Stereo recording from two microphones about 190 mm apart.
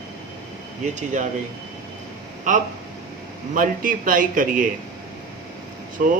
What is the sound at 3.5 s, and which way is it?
Speech, 45° right (ahead or behind).